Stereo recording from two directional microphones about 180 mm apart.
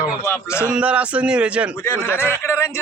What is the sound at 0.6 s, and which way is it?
Speech, 5° right (ahead or behind).